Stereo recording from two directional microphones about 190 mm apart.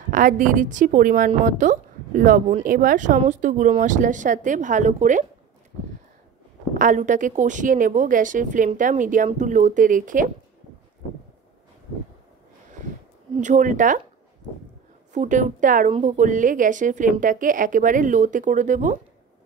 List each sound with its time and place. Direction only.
0.1 s a woman's voice: 45° right (ahead or behind)
6.8 s a woman's voice: 40° right (ahead or behind)
13.4 s a woman's voice: 40° right (ahead or behind)
15.1 s a woman's voice: 40° right (ahead or behind)